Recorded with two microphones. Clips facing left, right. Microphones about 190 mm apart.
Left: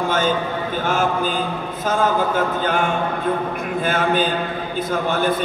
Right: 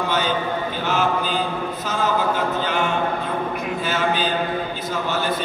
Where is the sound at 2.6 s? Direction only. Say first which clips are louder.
Left 2 dB; 50° left (ahead or behind).